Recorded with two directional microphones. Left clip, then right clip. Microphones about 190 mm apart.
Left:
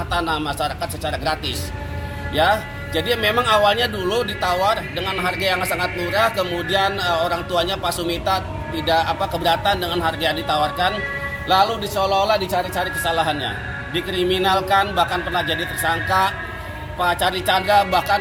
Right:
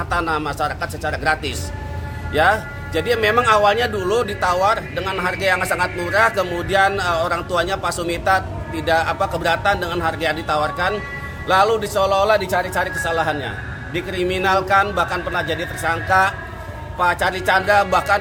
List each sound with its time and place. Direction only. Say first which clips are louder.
0.1 s a man's voice: right 1 dB; 10° right (ahead or behind)
14.2 s speech: left 1 dB; 35° right (ahead or behind)
14.4 s a man's voice: right 3 dB; 10° right (ahead or behind)